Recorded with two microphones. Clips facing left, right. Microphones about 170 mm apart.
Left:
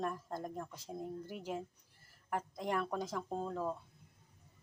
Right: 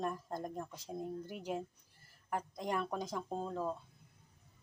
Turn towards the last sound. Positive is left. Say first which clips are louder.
# even
turn(degrees=0)  # may be behind; listen again after turning